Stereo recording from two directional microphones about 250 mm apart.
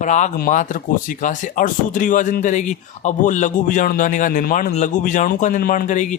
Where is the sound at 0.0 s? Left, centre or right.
Left.